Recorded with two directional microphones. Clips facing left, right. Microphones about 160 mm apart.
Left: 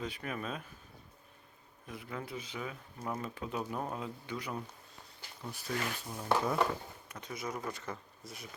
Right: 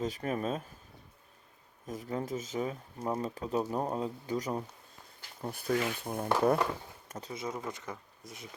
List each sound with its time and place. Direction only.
0.0 s speech: 40° right (ahead or behind)
1.9 s speech: 40° right (ahead or behind)
5.4 s speech: 55° right (ahead or behind)
7.1 s speech: 35° right (ahead or behind)